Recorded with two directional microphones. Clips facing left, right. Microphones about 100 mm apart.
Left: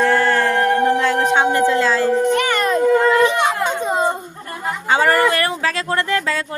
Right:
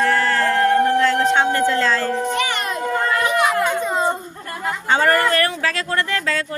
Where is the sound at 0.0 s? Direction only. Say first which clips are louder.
Left 2 dB; 20° left (ahead or behind).